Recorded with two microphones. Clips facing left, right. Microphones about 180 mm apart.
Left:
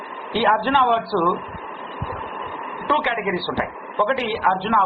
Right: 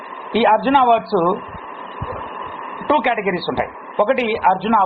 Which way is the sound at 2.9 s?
20° right (ahead or behind).